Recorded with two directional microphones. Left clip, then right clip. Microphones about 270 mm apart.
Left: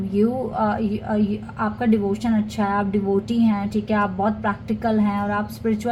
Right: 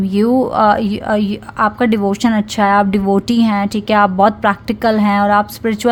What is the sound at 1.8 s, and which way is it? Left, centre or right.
A woman's voice, right.